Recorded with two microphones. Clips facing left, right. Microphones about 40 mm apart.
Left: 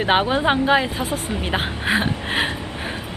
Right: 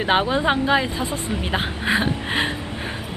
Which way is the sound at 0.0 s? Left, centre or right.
Centre.